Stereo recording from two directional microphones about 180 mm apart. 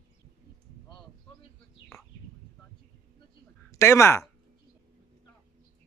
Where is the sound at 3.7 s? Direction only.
15° left (ahead or behind).